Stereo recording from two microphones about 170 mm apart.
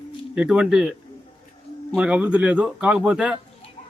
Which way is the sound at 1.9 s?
5° right (ahead or behind).